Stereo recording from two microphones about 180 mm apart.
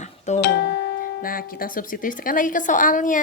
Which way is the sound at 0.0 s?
40° left (ahead or behind).